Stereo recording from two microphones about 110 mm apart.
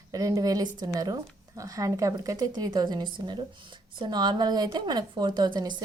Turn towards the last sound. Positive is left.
turn(degrees=-40)  # may be behind; listen again after turning